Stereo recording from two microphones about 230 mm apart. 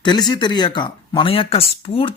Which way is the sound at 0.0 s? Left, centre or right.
Centre.